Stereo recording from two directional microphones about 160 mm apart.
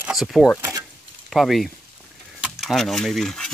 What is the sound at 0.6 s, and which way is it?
Keys jangling, 20° right (ahead or behind).